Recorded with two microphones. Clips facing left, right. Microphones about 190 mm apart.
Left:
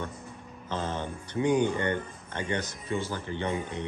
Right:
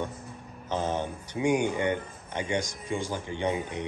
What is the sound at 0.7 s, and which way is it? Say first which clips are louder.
Speech: right 3 dB; 15° right (ahead or behind).